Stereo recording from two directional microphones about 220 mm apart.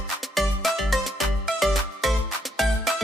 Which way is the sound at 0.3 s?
Centre (ahead or behind).